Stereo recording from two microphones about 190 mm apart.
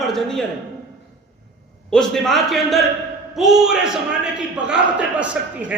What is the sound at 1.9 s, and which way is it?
A man's voice, centre (ahead or behind).